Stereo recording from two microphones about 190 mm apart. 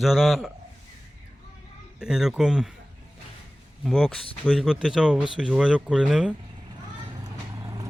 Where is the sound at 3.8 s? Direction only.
Centre (ahead or behind).